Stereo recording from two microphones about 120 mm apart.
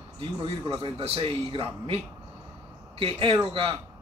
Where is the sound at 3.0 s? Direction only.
45° right (ahead or behind).